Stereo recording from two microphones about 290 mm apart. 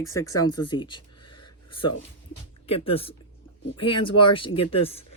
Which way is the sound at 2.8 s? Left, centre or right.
Centre.